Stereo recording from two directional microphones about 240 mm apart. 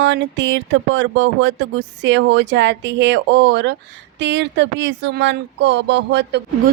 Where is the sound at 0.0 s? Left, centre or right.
Right.